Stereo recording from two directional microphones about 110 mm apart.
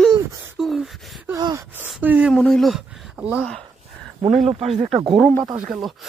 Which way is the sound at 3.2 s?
10° right (ahead or behind).